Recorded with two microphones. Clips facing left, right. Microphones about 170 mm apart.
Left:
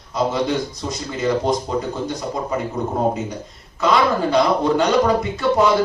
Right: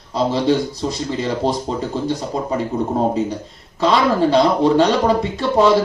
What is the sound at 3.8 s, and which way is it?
Speech, 30° right (ahead or behind).